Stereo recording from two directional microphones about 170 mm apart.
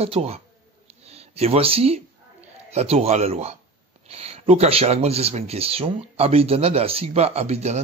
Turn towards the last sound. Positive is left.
turn(degrees=-40)  # may be behind; listen again after turning